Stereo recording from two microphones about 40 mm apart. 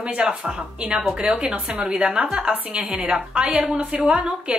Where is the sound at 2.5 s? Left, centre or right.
Right.